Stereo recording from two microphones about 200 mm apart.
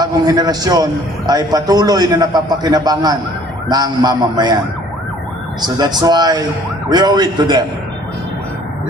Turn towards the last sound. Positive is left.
turn(degrees=-20)  # may be behind; listen again after turning